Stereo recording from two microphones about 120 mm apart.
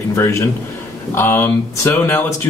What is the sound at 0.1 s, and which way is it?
Speech, 20° left (ahead or behind).